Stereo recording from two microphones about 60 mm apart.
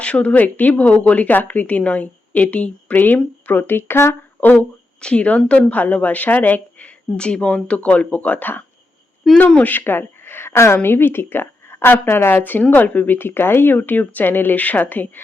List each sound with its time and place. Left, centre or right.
0.0 s speech: left
4.4 s speech: left
4.9 s speech: centre
9.2 s speech: centre
9.6 s speech: left